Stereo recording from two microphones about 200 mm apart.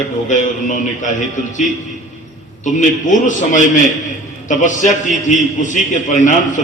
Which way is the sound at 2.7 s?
40° left (ahead or behind).